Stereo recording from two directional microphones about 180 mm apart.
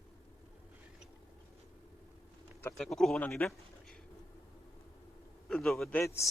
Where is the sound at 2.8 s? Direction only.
Centre (ahead or behind).